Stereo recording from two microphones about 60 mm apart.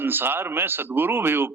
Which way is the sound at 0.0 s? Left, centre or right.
Right.